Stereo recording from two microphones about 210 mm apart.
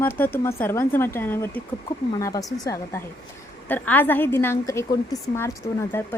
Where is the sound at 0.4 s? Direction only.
10° left (ahead or behind).